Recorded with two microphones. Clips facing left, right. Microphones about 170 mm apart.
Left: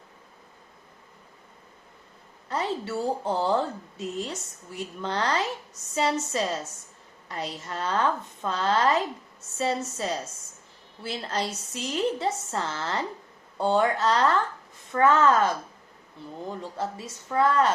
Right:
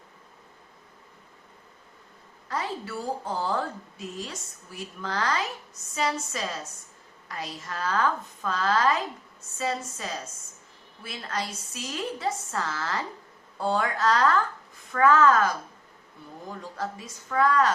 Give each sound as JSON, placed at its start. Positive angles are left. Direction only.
{"t": 2.5, "sound": "a woman's voice", "side_deg": 25}